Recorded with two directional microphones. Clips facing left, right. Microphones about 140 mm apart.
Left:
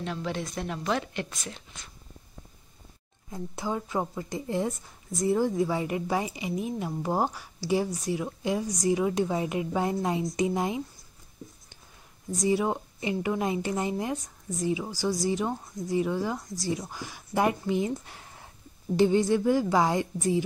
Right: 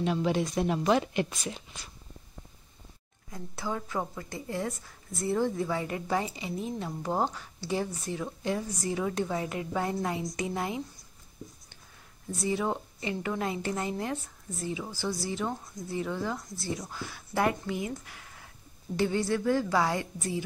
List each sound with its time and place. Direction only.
0.0 s a woman's voice: 15° right (ahead or behind)
3.3 s a woman's voice: 20° left (ahead or behind)
12.4 s a woman's voice: 15° left (ahead or behind)
18.9 s a woman's voice: 20° left (ahead or behind)